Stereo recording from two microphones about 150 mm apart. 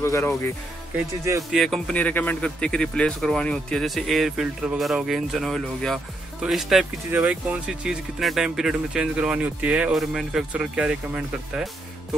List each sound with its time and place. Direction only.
0.0 s speech: 20° left (ahead or behind)
0.9 s speech: 20° right (ahead or behind)
1.5 s speech: centre (ahead or behind)